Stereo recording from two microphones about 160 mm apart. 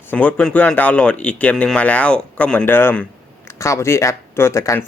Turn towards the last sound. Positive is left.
turn(degrees=15)  # may be behind; listen again after turning